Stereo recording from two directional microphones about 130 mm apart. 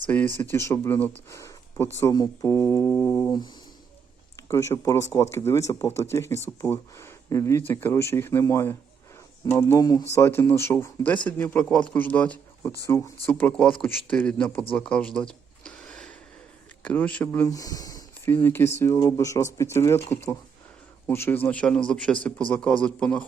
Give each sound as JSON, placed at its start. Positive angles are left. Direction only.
{"t": 0.1, "sound": "a man's voice", "side_deg": 15}
{"t": 4.4, "sound": "a man's voice", "side_deg": 20}
{"t": 14.8, "sound": "a sound", "side_deg": 10}
{"t": 16.8, "sound": "a man's voice", "side_deg": 10}
{"t": 17.4, "sound": "speech", "side_deg": 25}
{"t": 18.4, "sound": "a man's voice", "side_deg": 20}